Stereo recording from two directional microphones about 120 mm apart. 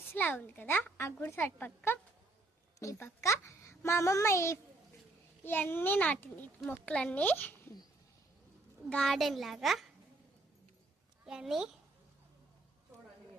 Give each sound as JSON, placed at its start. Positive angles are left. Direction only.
{"t": 0.1, "sound": "a woman's voice", "side_deg": 15}
{"t": 8.9, "sound": "a child's voice", "side_deg": 5}
{"t": 11.3, "sound": "a child's voice", "side_deg": -5}